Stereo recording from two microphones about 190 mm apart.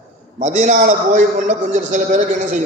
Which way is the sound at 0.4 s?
40° right (ahead or behind).